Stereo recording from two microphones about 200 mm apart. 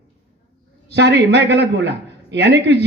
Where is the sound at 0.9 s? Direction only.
60° right (ahead or behind).